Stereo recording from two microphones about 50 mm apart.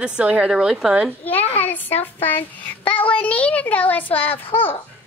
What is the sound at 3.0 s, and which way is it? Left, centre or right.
Child singing, left.